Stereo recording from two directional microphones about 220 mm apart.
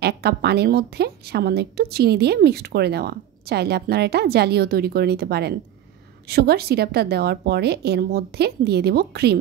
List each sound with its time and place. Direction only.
0.0 s a woman's voice: 45° right (ahead or behind)